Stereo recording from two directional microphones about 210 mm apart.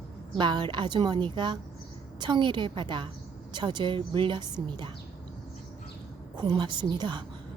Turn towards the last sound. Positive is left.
turn(degrees=-20)  # may be behind; listen again after turning